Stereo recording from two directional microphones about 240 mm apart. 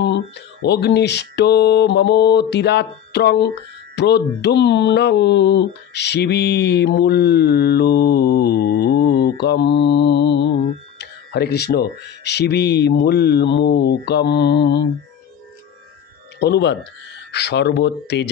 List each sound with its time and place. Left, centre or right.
0.7 s speech: left
16.3 s speech: left